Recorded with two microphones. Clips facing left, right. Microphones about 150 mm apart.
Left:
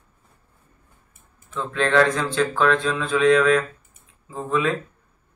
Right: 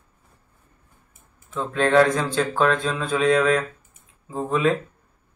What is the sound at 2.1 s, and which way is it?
Speech, 30° right (ahead or behind).